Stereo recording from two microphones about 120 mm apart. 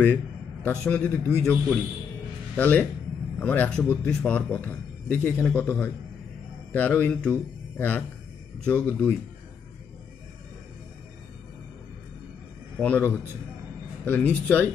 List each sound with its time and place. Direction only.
0.0 s a man's voice: 10° left (ahead or behind)
12.8 s a man's voice: 15° left (ahead or behind)